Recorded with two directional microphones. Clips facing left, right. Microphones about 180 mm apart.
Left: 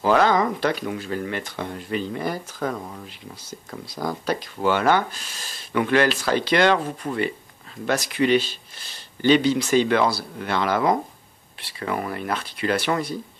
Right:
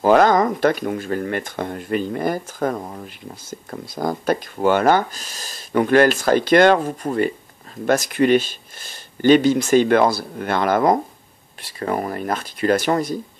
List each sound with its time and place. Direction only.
0.0 s speech: 45° right (ahead or behind)